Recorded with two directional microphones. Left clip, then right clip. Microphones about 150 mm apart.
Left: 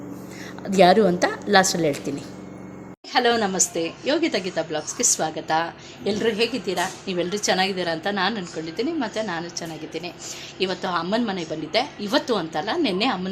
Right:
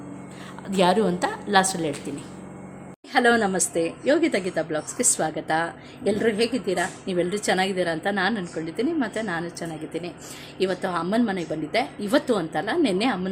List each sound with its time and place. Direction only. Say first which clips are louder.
0.7 s a woman's voice: left 5 dB; 10° left (ahead or behind)
3.1 s a woman's voice: even; 30° right (ahead or behind)